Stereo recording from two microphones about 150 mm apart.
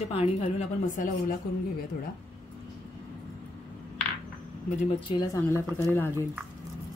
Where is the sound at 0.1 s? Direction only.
40° left (ahead or behind).